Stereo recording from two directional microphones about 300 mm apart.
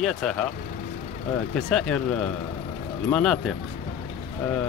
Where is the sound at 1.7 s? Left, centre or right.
Centre.